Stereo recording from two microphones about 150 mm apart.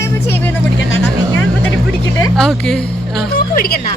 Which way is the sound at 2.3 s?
5° left (ahead or behind).